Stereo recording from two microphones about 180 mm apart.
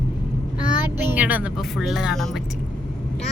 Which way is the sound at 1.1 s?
10° right (ahead or behind).